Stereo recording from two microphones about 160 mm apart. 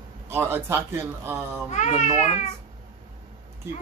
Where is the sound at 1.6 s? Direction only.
45° left (ahead or behind).